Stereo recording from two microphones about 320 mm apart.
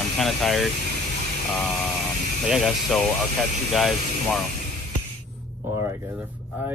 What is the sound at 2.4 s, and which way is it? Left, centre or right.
Speech, centre.